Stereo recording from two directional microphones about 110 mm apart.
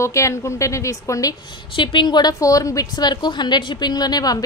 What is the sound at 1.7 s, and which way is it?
Speech, 50° left (ahead or behind).